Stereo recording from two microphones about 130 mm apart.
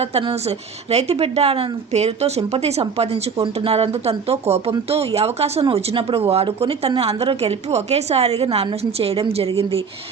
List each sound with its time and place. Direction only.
0.0 s speech: 50° right (ahead or behind)